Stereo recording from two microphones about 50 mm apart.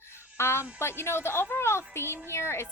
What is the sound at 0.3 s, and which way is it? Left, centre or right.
A woman's voice, left.